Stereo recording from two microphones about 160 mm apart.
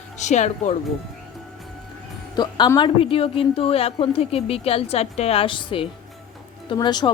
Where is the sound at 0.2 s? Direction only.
45° left (ahead or behind).